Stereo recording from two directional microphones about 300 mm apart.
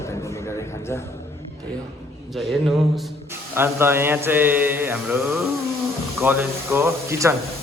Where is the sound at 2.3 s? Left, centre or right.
Centre.